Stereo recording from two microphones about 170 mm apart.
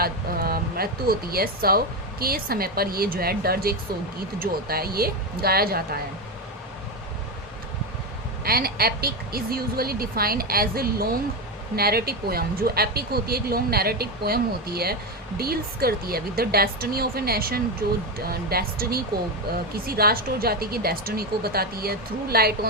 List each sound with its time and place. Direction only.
0.0 s speech: 65° right (ahead or behind)
8.4 s speech: 65° right (ahead or behind)